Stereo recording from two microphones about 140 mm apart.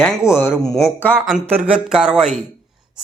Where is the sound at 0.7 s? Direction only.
Centre (ahead or behind).